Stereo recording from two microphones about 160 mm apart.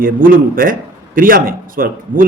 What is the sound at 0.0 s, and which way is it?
A man's voice, 60° right (ahead or behind).